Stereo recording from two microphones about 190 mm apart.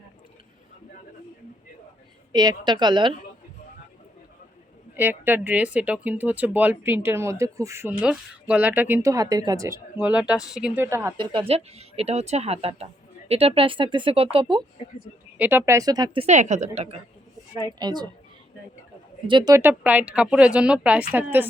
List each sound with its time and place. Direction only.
2.3 s speech: 20° right (ahead or behind)
4.9 s speech: 10° right (ahead or behind)
10.1 s speech: 5° right (ahead or behind); by 14.6 s 30° right (ahead or behind)
15.4 s speech: 10° right (ahead or behind)
16.2 s a woman's voice: 40° right (ahead or behind)
17.7 s speech: 20° right (ahead or behind)
19.3 s speech: 20° right (ahead or behind)